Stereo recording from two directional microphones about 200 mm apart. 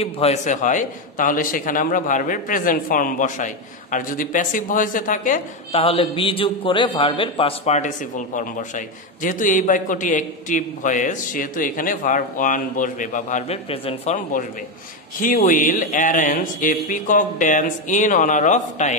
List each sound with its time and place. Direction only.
0.0 s a man's voice: 30° left (ahead or behind)
14.3 s a man's voice: 40° left (ahead or behind)